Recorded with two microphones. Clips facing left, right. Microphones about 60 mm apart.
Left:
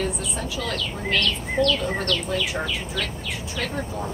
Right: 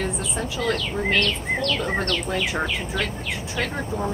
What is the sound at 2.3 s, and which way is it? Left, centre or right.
Speech, right.